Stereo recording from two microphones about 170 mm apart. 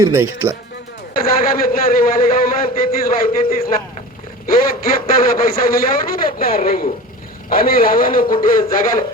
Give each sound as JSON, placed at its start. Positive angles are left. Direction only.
{"t": 0.0, "sound": "speech", "side_deg": -15}
{"t": 1.1, "sound": "a man's voice", "side_deg": 60}